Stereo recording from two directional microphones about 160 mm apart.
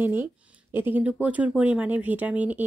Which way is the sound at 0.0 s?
15° right (ahead or behind).